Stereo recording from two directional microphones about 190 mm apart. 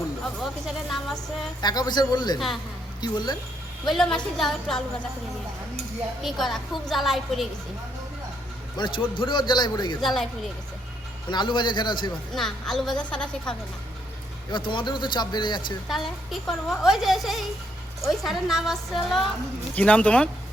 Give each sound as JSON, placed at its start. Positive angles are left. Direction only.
{"t": 0.3, "sound": "a child's voice", "side_deg": 0}
{"t": 1.6, "sound": "a man's voice", "side_deg": 20}
{"t": 3.8, "sound": "a child's voice", "side_deg": 0}
{"t": 6.2, "sound": "a child's voice", "side_deg": 0}
{"t": 8.8, "sound": "a man's voice", "side_deg": 25}
{"t": 10.0, "sound": "a child's voice", "side_deg": 0}
{"t": 11.3, "sound": "a man's voice", "side_deg": 25}
{"t": 12.3, "sound": "a child's voice", "side_deg": 0}
{"t": 14.5, "sound": "a man's voice", "side_deg": 25}
{"t": 15.9, "sound": "a child's voice", "side_deg": 0}